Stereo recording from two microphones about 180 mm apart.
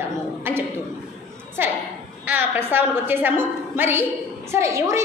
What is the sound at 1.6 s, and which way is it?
A woman's voice, 10° right (ahead or behind).